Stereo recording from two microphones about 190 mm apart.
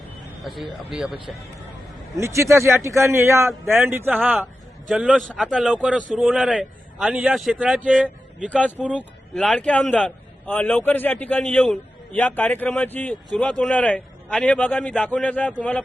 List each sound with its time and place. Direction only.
0.5 s a man's voice: centre (ahead or behind)
2.1 s a man's voice: 15° right (ahead or behind)
8.9 s a man's voice: 5° left (ahead or behind)